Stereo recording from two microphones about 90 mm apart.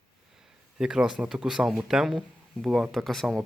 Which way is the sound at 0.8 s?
10° right (ahead or behind).